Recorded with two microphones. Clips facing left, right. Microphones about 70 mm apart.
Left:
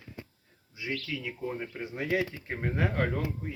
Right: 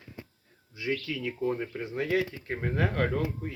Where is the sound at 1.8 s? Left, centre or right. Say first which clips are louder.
Left 1 dB; centre.